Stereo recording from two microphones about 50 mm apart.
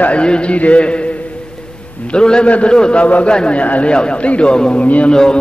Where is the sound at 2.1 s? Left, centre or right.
Centre.